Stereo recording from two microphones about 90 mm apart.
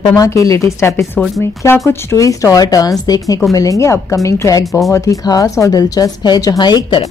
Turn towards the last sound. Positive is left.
turn(degrees=55)  # may be behind; listen again after turning